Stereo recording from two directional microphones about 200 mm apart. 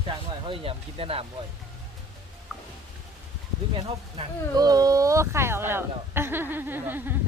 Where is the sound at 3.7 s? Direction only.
25° right (ahead or behind); by 7.1 s 10° right (ahead or behind).